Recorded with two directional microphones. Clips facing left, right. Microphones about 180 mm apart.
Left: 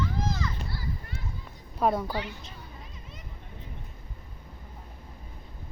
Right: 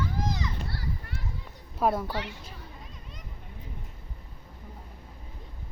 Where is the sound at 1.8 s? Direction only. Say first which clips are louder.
Even; centre (ahead or behind).